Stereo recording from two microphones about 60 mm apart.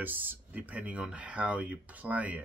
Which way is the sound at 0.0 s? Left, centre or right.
Right.